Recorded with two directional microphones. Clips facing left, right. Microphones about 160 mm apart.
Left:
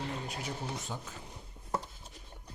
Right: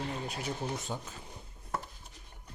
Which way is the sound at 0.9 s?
25° right (ahead or behind).